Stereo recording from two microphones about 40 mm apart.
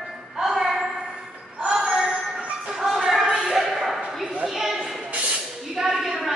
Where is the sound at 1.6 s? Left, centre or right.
Right.